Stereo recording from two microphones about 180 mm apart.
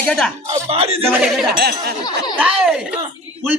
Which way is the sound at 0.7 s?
35° right (ahead or behind).